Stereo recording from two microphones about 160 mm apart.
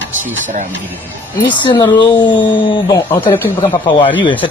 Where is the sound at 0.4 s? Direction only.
50° right (ahead or behind).